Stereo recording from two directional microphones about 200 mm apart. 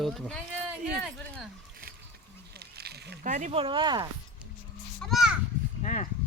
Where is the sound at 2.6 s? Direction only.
55° right (ahead or behind).